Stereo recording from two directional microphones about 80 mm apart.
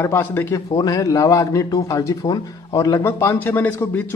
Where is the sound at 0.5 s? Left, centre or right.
Left.